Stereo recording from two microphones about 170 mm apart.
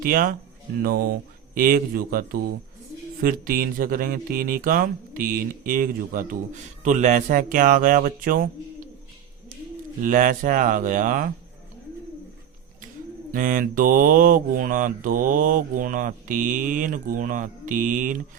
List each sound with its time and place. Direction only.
0.0 s speech: 60° right (ahead or behind)
10.0 s speech: 50° right (ahead or behind)
13.3 s speech: 55° right (ahead or behind)